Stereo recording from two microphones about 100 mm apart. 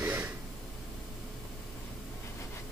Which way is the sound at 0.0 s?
20° right (ahead or behind).